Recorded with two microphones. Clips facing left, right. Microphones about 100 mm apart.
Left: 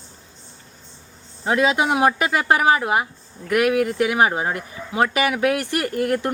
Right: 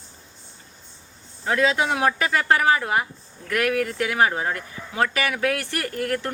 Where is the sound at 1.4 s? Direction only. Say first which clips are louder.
Left 2 dB; 20° left (ahead or behind).